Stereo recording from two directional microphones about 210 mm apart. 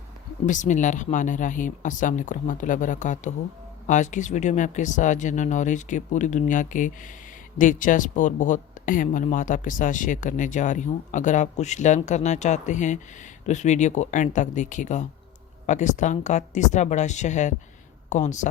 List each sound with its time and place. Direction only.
0.4 s speech: 35° left (ahead or behind)